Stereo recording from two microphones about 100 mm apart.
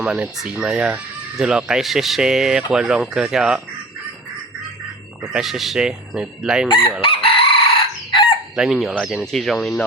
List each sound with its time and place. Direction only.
0.0 s speech: 10° right (ahead or behind)
5.2 s speech: 5° right (ahead or behind)
6.7 s chicken: 60° left (ahead or behind)
8.5 s speech: 5° right (ahead or behind)